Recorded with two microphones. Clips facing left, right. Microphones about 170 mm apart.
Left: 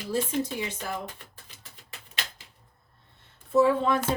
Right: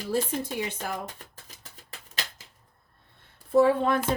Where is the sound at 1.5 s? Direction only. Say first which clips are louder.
Right 2 dB; 40° right (ahead or behind).